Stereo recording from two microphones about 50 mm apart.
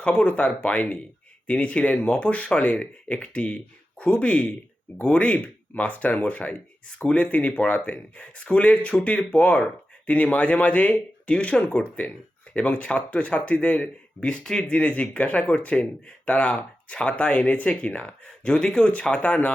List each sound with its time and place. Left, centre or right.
0.0 s speech: left
18.4 s speech: centre